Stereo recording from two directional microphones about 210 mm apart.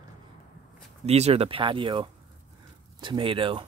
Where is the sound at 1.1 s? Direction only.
30° right (ahead or behind).